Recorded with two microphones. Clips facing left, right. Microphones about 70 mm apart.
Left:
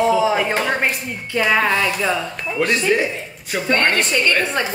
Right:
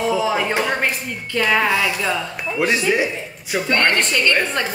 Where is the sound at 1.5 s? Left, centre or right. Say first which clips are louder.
Left 1 dB; centre.